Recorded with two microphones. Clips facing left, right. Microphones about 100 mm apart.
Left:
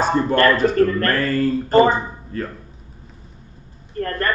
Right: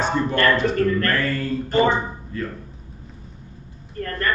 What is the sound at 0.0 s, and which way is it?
Speech, 35° left (ahead or behind).